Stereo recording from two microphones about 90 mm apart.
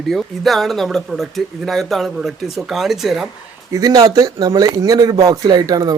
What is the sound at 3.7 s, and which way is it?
Speech, 40° right (ahead or behind).